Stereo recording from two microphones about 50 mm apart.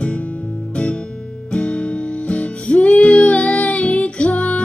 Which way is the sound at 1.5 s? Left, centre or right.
Left.